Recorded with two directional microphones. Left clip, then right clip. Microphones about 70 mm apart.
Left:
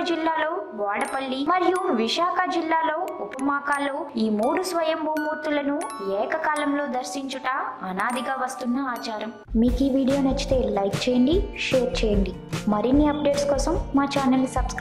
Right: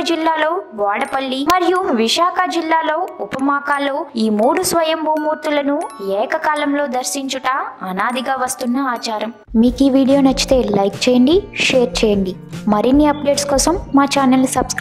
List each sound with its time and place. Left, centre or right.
0.0 s a woman's voice: right